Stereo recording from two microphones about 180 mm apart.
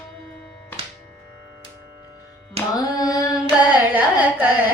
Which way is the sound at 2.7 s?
20° left (ahead or behind).